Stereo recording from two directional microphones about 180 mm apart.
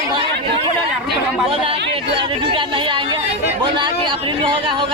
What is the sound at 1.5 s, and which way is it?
A man's voice, 30° right (ahead or behind).